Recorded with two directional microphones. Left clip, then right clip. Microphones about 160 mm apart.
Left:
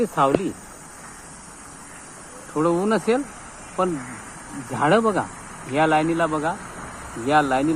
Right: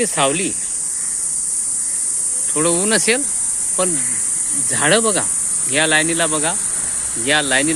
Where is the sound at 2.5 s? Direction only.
35° right (ahead or behind).